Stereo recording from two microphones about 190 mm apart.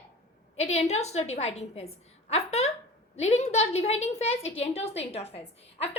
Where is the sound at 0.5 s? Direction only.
35° left (ahead or behind).